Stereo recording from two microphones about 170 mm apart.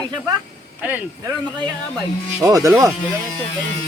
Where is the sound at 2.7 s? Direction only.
20° right (ahead or behind).